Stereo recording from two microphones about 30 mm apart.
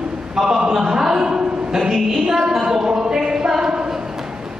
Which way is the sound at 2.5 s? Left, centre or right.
Centre.